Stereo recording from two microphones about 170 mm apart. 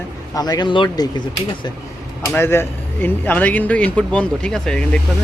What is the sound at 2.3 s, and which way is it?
Speech, 15° left (ahead or behind).